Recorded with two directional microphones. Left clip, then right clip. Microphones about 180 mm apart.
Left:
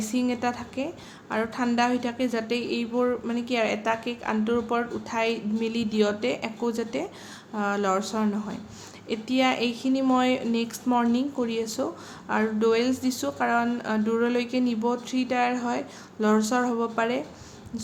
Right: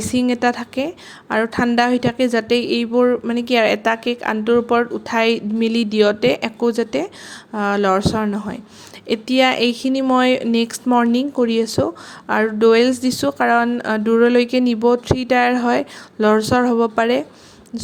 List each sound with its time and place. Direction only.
0.0 s a woman's voice: 45° right (ahead or behind)